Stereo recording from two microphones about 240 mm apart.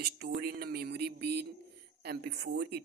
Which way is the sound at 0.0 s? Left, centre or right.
Right.